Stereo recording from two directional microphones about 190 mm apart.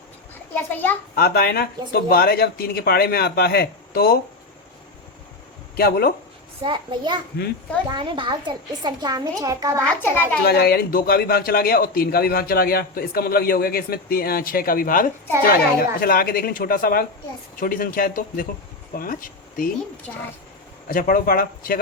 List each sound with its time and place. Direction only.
0.5 s a child's voice: 10° left (ahead or behind)
1.1 s a man's voice: 55° left (ahead or behind)
5.7 s a man's voice: 55° left (ahead or behind)
6.6 s a woman's voice: 25° right (ahead or behind)
9.8 s a child's voice: 10° left (ahead or behind)
10.4 s a man's voice: 55° left (ahead or behind)
20.1 s speech: 5° left (ahead or behind)
20.8 s a man's voice: 50° left (ahead or behind)